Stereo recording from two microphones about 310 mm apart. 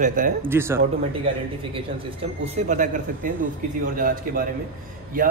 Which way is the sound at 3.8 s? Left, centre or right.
Right.